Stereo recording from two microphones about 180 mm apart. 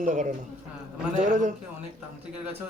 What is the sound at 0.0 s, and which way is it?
Speech, 45° right (ahead or behind).